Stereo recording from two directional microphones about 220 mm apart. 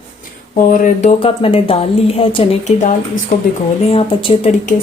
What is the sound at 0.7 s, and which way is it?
A woman's voice, 35° left (ahead or behind).